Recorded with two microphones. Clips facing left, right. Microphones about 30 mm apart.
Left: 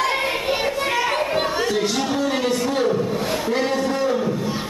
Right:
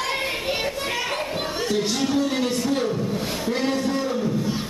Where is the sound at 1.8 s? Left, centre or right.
Left.